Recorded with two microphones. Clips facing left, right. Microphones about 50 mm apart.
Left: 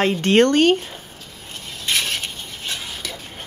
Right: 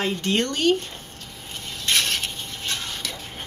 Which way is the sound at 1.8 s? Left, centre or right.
Centre.